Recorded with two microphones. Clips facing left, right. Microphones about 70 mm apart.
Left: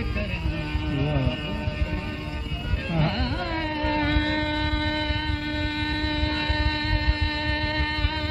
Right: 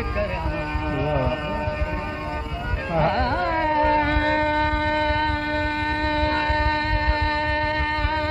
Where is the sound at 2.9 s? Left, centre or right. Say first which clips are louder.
Right 6 dB; right.